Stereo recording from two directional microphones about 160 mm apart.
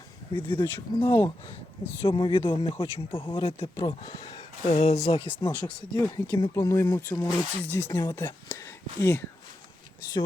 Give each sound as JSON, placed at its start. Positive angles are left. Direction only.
{"t": 0.3, "sound": "speech", "side_deg": 10}
{"t": 2.0, "sound": "speech", "side_deg": 30}
{"t": 4.6, "sound": "speech", "side_deg": 45}
{"t": 5.5, "sound": "speech", "side_deg": 10}
{"t": 6.3, "sound": "speech", "side_deg": 25}